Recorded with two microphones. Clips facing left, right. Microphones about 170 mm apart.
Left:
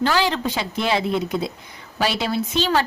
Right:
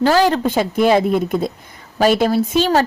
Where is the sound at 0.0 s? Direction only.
45° right (ahead or behind).